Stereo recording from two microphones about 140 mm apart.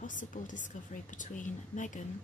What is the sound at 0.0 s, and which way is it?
Speech, 65° left (ahead or behind).